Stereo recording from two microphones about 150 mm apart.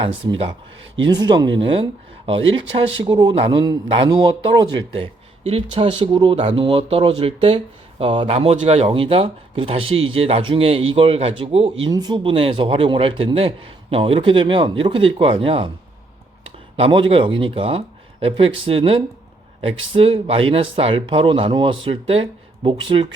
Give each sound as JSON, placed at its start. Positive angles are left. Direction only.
{"t": 0.0, "sound": "speech", "side_deg": -35}
{"t": 11.9, "sound": "speech", "side_deg": -25}